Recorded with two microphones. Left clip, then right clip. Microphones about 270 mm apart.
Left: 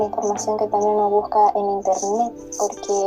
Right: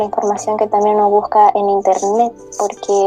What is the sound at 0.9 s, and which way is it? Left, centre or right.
Speech, right.